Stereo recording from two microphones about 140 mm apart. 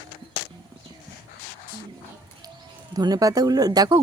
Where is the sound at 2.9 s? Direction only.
30° right (ahead or behind).